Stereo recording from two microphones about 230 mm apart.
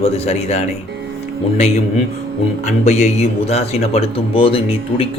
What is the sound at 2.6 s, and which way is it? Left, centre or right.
A man's voice, left.